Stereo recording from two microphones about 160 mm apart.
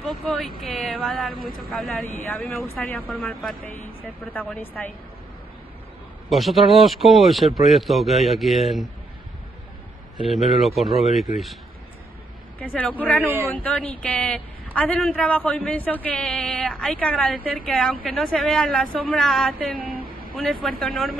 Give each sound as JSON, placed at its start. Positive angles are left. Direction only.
{"t": 0.0, "sound": "speech", "side_deg": 0}
{"t": 2.6, "sound": "a woman's voice", "side_deg": 15}
{"t": 3.2, "sound": "a woman's voice", "side_deg": 0}
{"t": 6.2, "sound": "speech", "side_deg": 0}
{"t": 10.1, "sound": "speech", "side_deg": 0}
{"t": 12.5, "sound": "a woman's voice", "side_deg": 10}
{"t": 19.7, "sound": "speech", "side_deg": -65}
{"t": 20.6, "sound": "speech", "side_deg": 0}